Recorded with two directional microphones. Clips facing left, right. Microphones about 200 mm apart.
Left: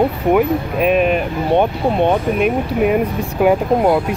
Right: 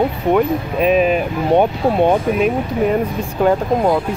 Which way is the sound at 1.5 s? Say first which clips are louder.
Right 1 dB; 10° right (ahead or behind).